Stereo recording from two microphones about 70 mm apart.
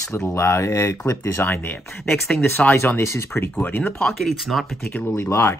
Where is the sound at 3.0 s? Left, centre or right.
Left.